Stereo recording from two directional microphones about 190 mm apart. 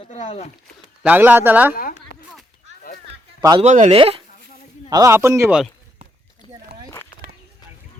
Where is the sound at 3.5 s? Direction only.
40° right (ahead or behind).